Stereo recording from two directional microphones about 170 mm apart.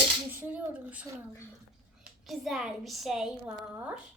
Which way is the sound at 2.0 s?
Centre (ahead or behind).